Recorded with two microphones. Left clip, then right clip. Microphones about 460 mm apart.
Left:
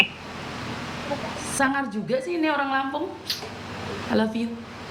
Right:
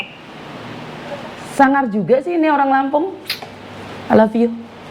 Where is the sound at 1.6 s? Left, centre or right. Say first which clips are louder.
Right 11 dB; right.